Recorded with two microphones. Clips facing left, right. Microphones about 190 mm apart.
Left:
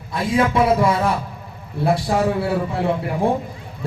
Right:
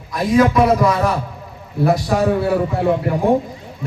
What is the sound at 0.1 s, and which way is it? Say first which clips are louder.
A man's voice: right 4 dB; 30° left (ahead or behind).